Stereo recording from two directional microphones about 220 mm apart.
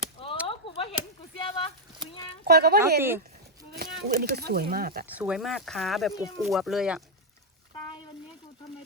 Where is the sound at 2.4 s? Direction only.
45° right (ahead or behind).